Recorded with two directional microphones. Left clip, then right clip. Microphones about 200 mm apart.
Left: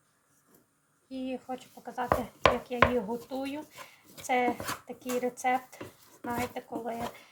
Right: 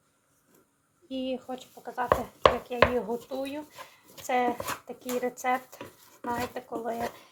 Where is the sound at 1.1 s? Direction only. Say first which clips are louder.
Right 4 dB; 35° right (ahead or behind).